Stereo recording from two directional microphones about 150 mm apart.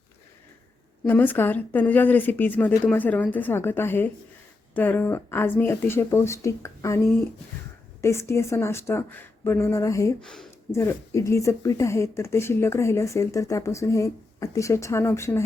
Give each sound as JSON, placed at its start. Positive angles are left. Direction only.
{"t": 1.0, "sound": "speech", "side_deg": 10}
{"t": 10.2, "sound": "speech", "side_deg": 5}
{"t": 10.7, "sound": "speech", "side_deg": 20}